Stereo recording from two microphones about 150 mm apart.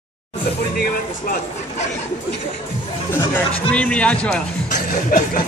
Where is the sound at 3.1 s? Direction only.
10° left (ahead or behind).